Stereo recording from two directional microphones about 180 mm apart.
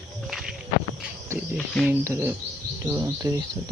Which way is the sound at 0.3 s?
Centre (ahead or behind).